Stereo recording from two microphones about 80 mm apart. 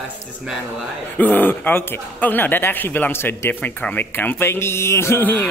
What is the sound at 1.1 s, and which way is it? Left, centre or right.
Speech, left.